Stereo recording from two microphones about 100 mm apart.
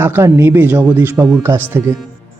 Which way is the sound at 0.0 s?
25° right (ahead or behind).